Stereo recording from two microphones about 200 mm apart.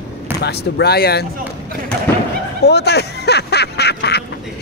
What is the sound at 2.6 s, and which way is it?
Speech, 55° left (ahead or behind).